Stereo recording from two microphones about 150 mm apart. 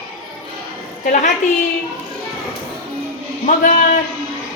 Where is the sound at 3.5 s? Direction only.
60° left (ahead or behind).